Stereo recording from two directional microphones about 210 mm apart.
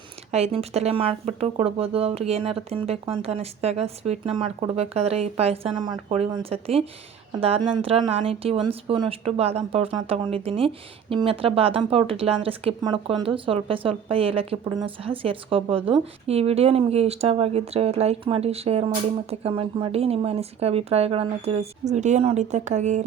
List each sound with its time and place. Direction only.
0.3 s speech: 30° right (ahead or behind)